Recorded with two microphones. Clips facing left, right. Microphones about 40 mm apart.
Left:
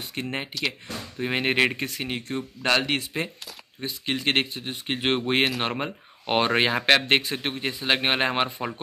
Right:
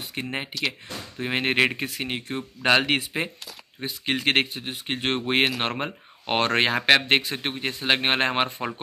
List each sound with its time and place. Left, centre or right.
0.1 s speech: centre